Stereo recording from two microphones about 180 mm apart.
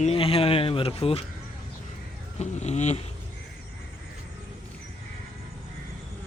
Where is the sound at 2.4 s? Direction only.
40° left (ahead or behind).